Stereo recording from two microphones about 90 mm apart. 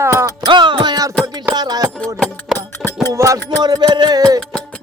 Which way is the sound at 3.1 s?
35° right (ahead or behind).